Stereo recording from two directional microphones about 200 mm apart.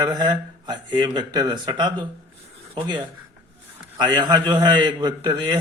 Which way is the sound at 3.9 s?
20° right (ahead or behind).